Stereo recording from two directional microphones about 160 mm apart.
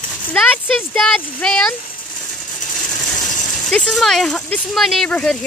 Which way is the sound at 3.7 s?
5° left (ahead or behind).